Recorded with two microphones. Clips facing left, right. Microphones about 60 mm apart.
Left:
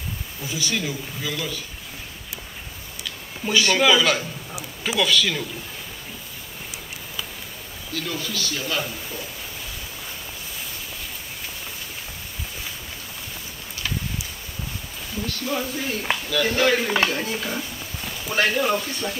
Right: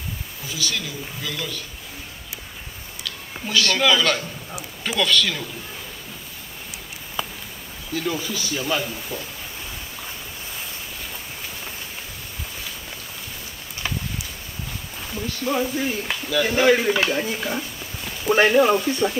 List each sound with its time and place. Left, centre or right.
0.5 s a man's voice: left
3.0 s a man's voice: centre
7.9 s speech: centre
15.2 s speech: centre
16.9 s a man's voice: centre
17.2 s speech: centre
18.3 s speech: right